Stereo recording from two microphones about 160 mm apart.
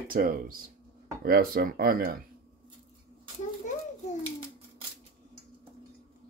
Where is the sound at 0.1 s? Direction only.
65° right (ahead or behind).